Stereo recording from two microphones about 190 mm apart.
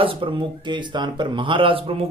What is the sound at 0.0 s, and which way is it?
Speech, 30° right (ahead or behind).